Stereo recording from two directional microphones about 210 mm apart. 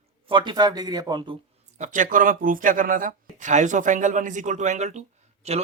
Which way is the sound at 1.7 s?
35° right (ahead or behind).